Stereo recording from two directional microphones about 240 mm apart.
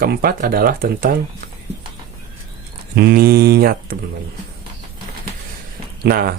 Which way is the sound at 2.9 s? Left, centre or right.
Right.